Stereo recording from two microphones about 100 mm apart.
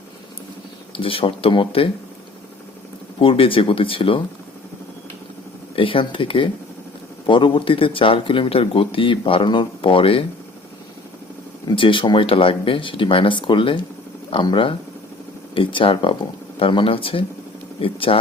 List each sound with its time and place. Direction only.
0.9 s speech: 60° left (ahead or behind)
3.2 s speech: 65° left (ahead or behind)
5.7 s speech: 60° left (ahead or behind)
11.6 s speech: 55° left (ahead or behind)